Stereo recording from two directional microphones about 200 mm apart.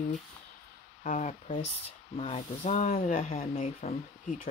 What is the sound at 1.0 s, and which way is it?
Speech, 40° left (ahead or behind).